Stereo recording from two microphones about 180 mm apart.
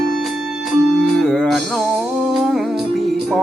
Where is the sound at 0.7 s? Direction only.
Centre (ahead or behind).